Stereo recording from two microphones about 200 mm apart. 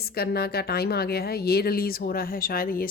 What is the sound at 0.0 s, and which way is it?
Speech, 50° left (ahead or behind).